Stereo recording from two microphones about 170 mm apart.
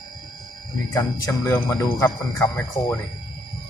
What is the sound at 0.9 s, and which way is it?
Speech, 20° left (ahead or behind).